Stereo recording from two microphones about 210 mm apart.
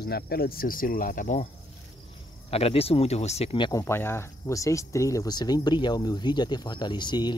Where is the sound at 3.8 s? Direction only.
10° left (ahead or behind).